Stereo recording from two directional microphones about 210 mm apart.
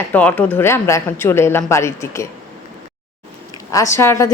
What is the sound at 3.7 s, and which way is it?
Speech, 15° left (ahead or behind).